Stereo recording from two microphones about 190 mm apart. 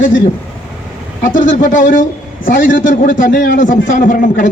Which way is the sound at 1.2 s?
45° left (ahead or behind).